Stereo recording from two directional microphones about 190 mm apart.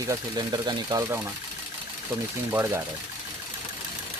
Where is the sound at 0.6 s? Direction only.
20° right (ahead or behind).